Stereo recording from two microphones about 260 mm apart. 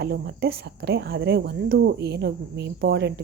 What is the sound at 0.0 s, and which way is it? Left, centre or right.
Speech, right.